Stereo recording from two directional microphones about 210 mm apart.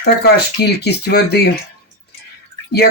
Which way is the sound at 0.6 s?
50° left (ahead or behind).